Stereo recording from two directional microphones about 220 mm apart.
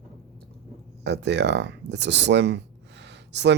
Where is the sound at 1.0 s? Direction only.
50° right (ahead or behind).